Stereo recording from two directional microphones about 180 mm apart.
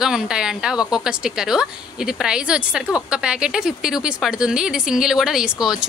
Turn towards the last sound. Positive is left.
turn(degrees=-5)  # may be behind; listen again after turning